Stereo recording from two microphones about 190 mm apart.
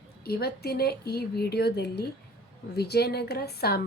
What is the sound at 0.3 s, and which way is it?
A woman's voice, 55° left (ahead or behind).